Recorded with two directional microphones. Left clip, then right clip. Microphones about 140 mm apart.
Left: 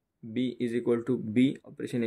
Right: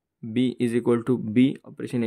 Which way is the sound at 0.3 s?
65° right (ahead or behind).